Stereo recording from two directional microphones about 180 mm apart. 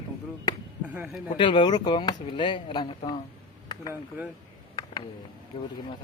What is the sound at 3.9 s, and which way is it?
Speech, 10° right (ahead or behind).